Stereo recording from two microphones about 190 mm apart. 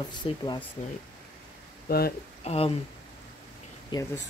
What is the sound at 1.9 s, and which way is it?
Speech, 55° left (ahead or behind).